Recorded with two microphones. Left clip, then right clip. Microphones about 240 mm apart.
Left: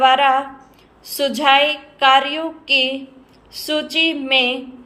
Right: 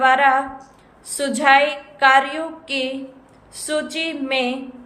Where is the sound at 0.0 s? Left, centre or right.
Centre.